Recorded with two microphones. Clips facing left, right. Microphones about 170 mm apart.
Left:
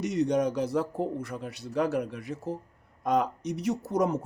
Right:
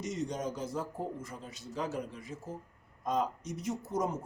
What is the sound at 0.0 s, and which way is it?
Speech, 70° left (ahead or behind).